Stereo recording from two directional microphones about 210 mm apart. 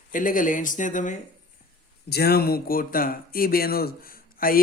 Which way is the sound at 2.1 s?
50° left (ahead or behind).